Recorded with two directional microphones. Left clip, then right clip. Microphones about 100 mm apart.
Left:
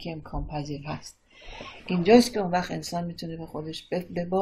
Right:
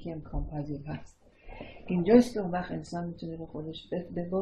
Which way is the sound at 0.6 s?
5° left (ahead or behind).